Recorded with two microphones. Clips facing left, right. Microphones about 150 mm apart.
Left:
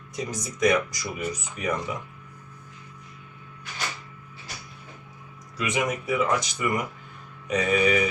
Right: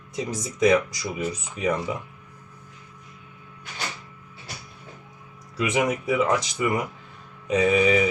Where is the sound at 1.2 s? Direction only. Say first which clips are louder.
Right 4 dB; 25° right (ahead or behind).